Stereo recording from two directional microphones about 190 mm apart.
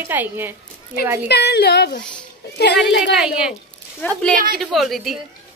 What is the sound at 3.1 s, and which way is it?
Speech, 5° right (ahead or behind).